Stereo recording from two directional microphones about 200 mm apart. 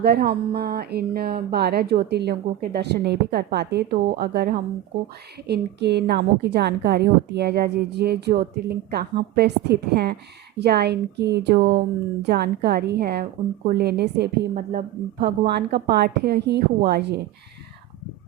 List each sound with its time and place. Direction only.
0.0 s a woman's voice: 50° right (ahead or behind)